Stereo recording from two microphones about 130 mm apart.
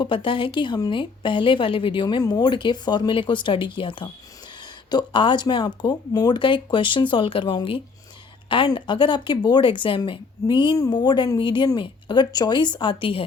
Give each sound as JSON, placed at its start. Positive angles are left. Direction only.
{"t": 0.0, "sound": "speech", "side_deg": 40}